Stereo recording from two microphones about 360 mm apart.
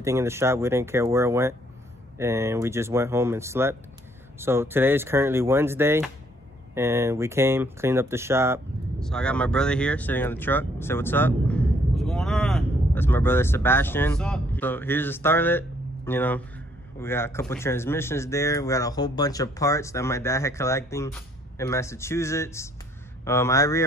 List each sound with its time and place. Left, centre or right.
0.0 s a man's voice: centre